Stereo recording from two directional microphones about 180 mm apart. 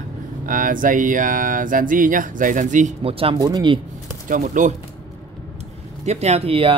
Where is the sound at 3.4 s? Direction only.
20° right (ahead or behind).